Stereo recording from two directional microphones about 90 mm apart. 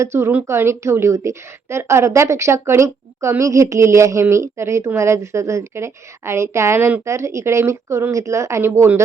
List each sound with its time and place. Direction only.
0.0 s a woman's voice: 30° right (ahead or behind)